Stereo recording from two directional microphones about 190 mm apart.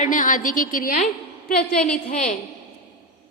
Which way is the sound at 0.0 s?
45° left (ahead or behind).